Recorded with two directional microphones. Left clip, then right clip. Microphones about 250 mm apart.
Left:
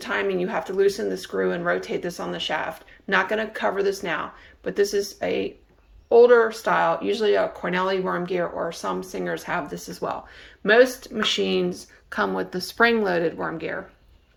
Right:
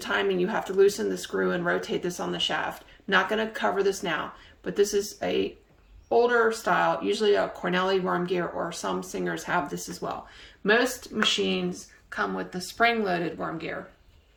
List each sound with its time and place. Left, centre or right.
0.0 s speech: centre